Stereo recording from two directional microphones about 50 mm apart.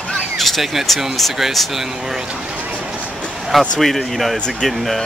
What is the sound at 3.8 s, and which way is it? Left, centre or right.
Speech, centre.